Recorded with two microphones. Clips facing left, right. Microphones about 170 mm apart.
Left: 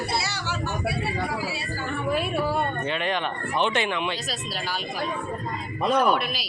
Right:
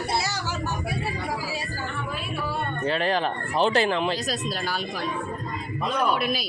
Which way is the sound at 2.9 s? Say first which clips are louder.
Right 3 dB; 35° right (ahead or behind).